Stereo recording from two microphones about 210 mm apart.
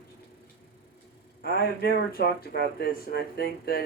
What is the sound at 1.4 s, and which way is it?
Speech, 45° left (ahead or behind).